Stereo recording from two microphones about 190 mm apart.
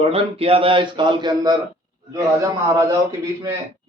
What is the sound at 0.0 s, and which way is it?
A man's voice, 30° right (ahead or behind).